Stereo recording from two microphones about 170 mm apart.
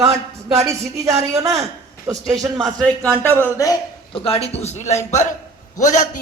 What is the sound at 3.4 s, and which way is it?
Speech, 20° left (ahead or behind).